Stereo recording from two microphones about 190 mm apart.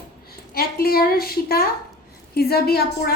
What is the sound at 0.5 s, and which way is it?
A woman's voice, 50° left (ahead or behind).